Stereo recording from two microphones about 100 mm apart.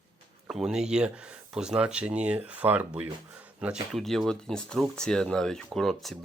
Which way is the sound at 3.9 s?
5° left (ahead or behind).